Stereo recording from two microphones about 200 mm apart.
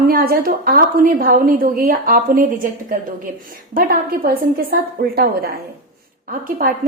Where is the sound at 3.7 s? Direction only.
45° right (ahead or behind).